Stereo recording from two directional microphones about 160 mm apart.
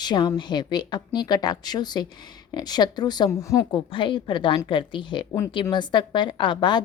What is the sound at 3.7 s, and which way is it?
A woman's voice, 30° left (ahead or behind).